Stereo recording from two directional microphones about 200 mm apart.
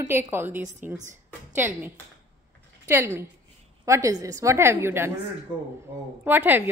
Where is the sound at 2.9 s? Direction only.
10° right (ahead or behind).